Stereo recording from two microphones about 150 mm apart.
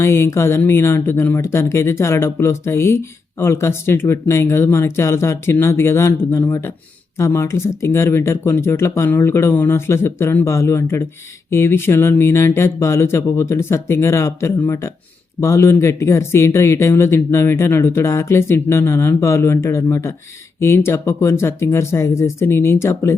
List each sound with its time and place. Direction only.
0.0 s speech: 15° left (ahead or behind)